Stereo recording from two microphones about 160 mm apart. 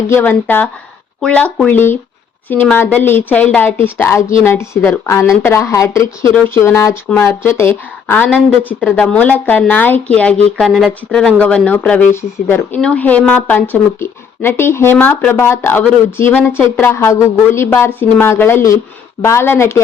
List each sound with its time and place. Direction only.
0.1 s speech: 15° left (ahead or behind)